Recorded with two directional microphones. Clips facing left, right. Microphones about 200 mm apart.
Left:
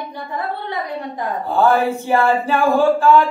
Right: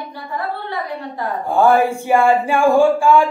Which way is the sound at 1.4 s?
10° right (ahead or behind).